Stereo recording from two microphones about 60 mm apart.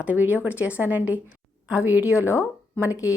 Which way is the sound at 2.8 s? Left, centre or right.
Left.